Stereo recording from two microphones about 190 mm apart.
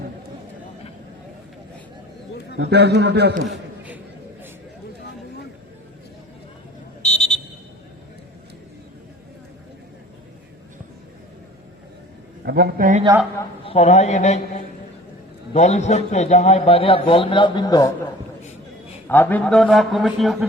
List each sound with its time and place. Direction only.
2.6 s a man's voice: 60° right (ahead or behind)
7.0 s buzzer: 5° left (ahead or behind)
12.5 s a man's voice: 55° right (ahead or behind)
13.7 s a man's voice: 35° left (ahead or behind)
19.0 s a man's voice: 10° left (ahead or behind)